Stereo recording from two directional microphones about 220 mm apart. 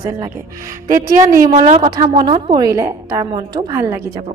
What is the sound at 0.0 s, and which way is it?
A woman's voice, 15° right (ahead or behind).